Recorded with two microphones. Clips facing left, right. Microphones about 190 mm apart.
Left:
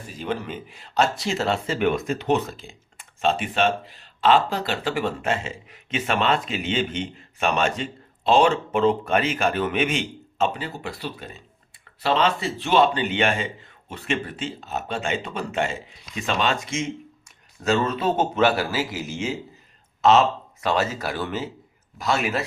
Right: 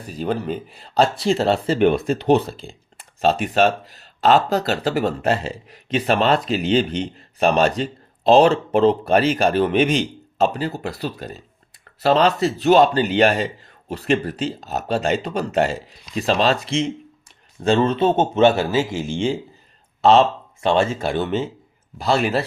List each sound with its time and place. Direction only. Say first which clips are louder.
0.1 s speech: right 6 dB; 35° right (ahead or behind)